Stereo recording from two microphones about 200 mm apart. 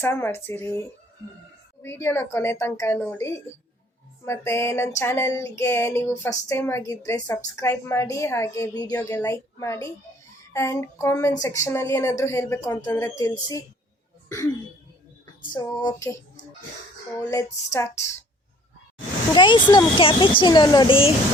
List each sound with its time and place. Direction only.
0.0 s a woman's voice: 10° left (ahead or behind)
15.5 s speech: 20° left (ahead or behind)
17.2 s a woman's voice: 15° left (ahead or behind)
19.3 s speech: 25° left (ahead or behind)